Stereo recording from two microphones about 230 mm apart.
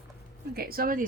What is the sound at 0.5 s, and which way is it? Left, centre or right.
Speech, right.